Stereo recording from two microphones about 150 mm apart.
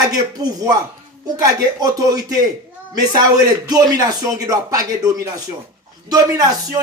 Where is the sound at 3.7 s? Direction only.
25° right (ahead or behind).